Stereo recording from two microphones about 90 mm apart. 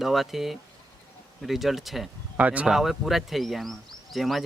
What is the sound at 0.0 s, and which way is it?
Speech, centre (ahead or behind).